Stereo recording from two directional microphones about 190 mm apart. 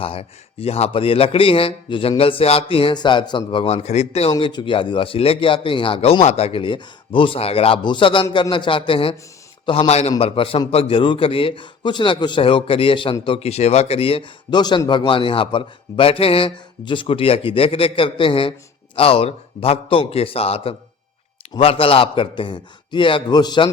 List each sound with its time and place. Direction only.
0.0 s speech: 30° left (ahead or behind)